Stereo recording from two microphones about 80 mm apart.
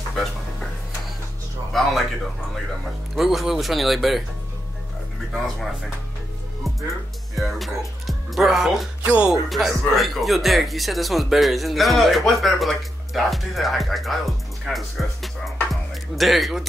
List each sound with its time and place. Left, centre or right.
0.1 s a sound: centre
1.7 s a sound: centre
3.2 s speech: centre
5.3 s speech: centre
7.3 s speech: centre
9.0 s speech: centre
9.5 s speech: centre
15.7 s music: centre